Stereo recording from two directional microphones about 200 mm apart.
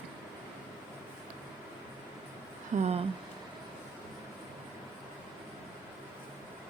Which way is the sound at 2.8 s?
30° right (ahead or behind).